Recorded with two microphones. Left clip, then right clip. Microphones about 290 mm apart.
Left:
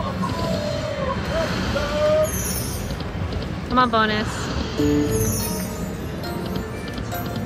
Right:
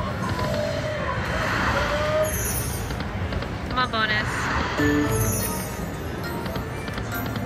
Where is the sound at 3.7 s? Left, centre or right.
Centre.